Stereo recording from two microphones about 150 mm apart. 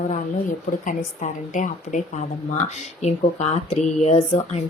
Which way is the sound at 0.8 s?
60° left (ahead or behind).